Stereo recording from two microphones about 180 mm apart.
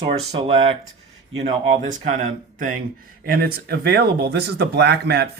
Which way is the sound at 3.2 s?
55° right (ahead or behind).